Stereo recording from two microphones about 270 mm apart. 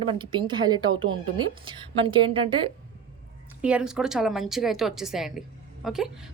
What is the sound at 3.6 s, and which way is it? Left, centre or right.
A woman's voice, centre.